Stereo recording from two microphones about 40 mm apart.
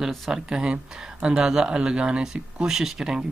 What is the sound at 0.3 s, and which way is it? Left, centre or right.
Speech, centre.